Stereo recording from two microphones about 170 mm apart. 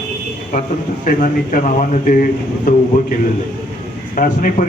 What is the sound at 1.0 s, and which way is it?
Speech, 55° left (ahead or behind).